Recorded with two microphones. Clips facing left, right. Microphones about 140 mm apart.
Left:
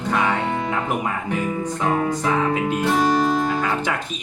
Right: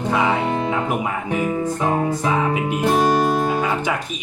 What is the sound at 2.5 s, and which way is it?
Speech, 10° right (ahead or behind).